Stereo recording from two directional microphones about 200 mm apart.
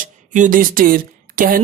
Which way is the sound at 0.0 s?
40° right (ahead or behind).